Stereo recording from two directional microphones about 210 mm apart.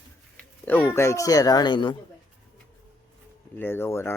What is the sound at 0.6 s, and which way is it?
Speech, 10° left (ahead or behind).